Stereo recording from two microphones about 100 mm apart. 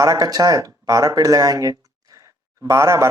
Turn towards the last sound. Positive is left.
turn(degrees=-30)  # may be behind; listen again after turning